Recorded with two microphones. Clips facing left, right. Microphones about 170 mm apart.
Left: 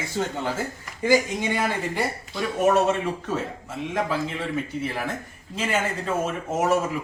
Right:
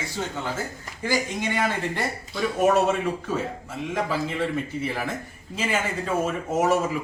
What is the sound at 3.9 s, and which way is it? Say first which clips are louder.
Speech: even; centre (ahead or behind).